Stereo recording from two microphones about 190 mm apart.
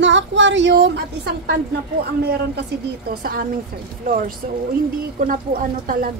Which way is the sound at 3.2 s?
50° right (ahead or behind).